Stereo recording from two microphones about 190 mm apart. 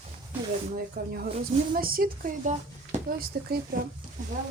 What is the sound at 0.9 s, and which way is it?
Speech, 55° right (ahead or behind).